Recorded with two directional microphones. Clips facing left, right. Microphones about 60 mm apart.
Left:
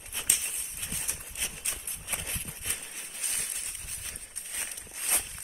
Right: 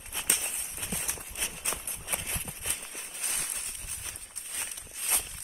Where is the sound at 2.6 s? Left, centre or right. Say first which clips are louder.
Left 1 dB; centre.